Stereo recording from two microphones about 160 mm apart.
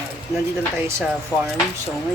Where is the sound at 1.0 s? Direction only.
5° right (ahead or behind).